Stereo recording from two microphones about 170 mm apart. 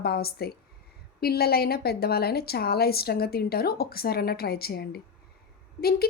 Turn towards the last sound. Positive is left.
turn(degrees=65)  # may be behind; listen again after turning